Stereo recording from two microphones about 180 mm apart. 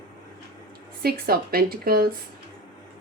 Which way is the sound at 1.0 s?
60° right (ahead or behind).